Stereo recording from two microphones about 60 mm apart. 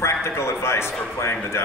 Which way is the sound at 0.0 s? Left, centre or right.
Left.